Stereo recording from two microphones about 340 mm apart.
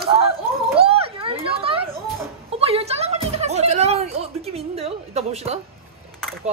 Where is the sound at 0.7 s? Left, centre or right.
Centre.